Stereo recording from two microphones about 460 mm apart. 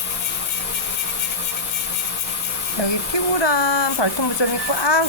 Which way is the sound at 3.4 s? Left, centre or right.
Left.